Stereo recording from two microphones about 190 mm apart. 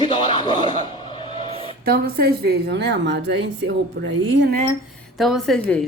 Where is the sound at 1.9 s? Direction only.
50° right (ahead or behind).